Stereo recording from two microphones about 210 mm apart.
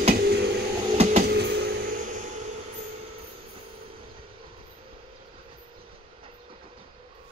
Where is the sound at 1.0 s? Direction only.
30° right (ahead or behind).